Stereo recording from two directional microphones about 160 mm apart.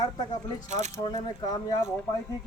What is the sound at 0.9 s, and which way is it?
Speech, 25° left (ahead or behind).